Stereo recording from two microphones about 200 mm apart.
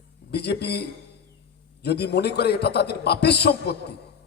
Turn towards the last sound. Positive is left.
turn(degrees=55)  # may be behind; listen again after turning